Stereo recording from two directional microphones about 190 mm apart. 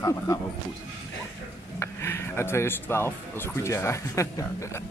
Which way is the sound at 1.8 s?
15° left (ahead or behind).